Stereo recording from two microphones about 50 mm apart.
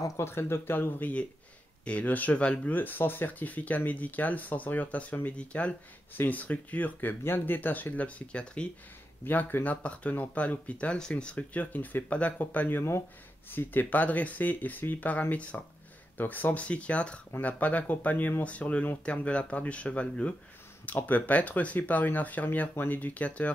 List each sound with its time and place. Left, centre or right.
0.2 s speech: left
1.9 s speech: left
2.4 s speech: left
2.7 s speech: left
6.1 s speech: left
9.2 s speech: left
11.0 s speech: centre
11.5 s speech: left
13.5 s speech: left
16.6 s speech: left
20.8 s speech: left